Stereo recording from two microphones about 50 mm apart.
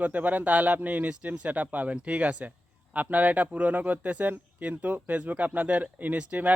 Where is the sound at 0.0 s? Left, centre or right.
Right.